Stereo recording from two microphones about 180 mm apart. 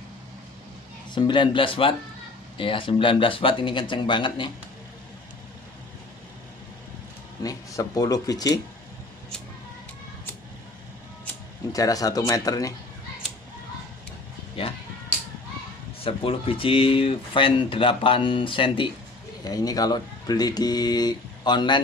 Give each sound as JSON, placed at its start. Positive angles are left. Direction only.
{"t": 1.1, "sound": "speech", "side_deg": 25}
{"t": 7.4, "sound": "speech", "side_deg": 20}
{"t": 11.7, "sound": "speech", "side_deg": 20}
{"t": 14.6, "sound": "a sound", "side_deg": 30}
{"t": 16.0, "sound": "speech", "side_deg": 30}